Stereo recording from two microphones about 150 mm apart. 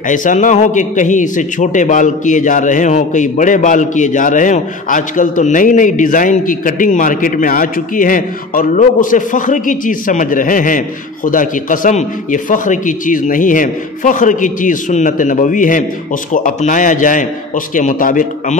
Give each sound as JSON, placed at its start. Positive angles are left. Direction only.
{"t": 0.1, "sound": "a man's voice", "side_deg": 60}